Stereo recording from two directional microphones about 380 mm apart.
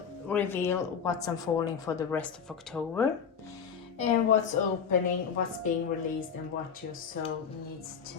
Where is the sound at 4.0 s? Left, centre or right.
Centre.